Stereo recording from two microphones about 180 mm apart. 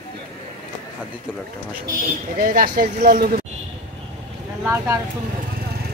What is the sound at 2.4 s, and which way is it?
Speech, 50° right (ahead or behind).